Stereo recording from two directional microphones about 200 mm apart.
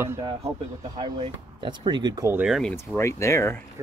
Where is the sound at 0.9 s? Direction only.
25° right (ahead or behind).